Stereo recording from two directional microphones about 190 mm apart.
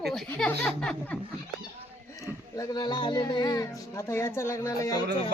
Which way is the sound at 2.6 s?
20° left (ahead or behind).